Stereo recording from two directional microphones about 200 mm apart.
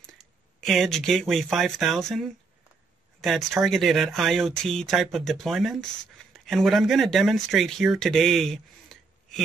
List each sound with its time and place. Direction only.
0.0 s speech: centre (ahead or behind)